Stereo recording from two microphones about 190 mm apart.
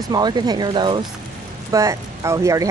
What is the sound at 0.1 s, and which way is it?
Speech, 20° right (ahead or behind).